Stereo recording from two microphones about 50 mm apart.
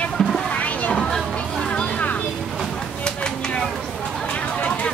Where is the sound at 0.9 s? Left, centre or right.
Centre.